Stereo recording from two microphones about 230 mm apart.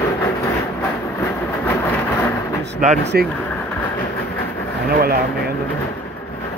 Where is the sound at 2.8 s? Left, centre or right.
Right.